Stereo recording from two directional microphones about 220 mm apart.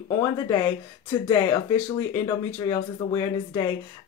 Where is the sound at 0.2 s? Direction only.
15° left (ahead or behind).